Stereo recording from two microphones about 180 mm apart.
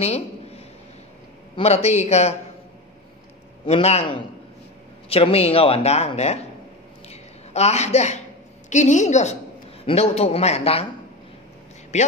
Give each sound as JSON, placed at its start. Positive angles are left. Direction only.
{"t": 0.0, "sound": "a man's voice", "side_deg": 35}
{"t": 1.6, "sound": "speech", "side_deg": 35}
{"t": 3.6, "sound": "speech", "side_deg": 35}
{"t": 7.1, "sound": "a sound", "side_deg": 35}
{"t": 8.6, "sound": "speech", "side_deg": 45}